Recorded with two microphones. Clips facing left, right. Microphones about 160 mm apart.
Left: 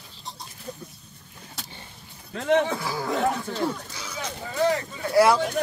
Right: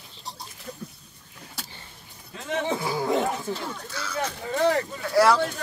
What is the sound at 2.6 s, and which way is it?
Speech, 20° right (ahead or behind).